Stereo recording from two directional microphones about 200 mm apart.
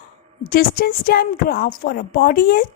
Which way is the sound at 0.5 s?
45° left (ahead or behind).